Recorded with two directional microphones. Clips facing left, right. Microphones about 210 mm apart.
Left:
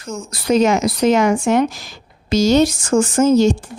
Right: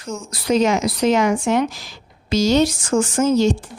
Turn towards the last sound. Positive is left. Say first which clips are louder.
# left 3 dB
turn(degrees=45)  # may be behind; listen again after turning